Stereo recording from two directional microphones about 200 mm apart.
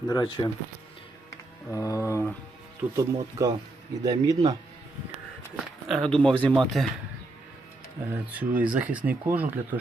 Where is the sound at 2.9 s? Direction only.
15° right (ahead or behind).